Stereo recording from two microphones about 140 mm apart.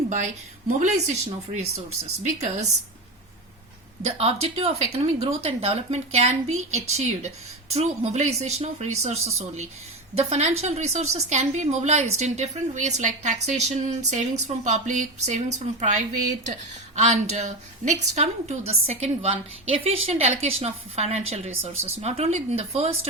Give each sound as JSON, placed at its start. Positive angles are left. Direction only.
{"t": 0.8, "sound": "a woman's voice", "side_deg": -55}
{"t": 2.2, "sound": "a woman's voice", "side_deg": -55}
{"t": 4.2, "sound": "a woman's voice", "side_deg": -45}